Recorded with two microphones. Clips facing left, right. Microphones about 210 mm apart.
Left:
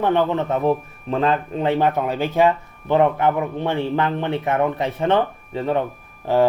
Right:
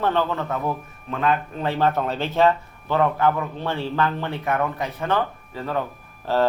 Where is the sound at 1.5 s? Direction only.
20° left (ahead or behind).